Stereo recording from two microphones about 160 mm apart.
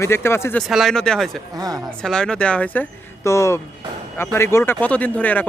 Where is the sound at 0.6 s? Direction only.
Centre (ahead or behind).